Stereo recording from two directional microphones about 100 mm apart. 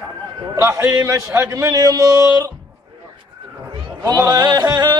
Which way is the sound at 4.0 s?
35° right (ahead or behind).